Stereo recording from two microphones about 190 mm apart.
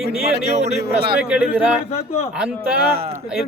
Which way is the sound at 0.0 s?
35° right (ahead or behind).